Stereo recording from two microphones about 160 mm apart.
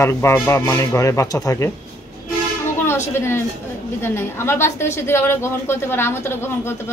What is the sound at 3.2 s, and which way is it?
A woman's voice, 15° left (ahead or behind).